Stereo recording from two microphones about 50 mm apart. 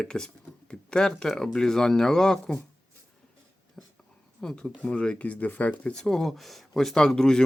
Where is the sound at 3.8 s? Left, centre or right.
Centre.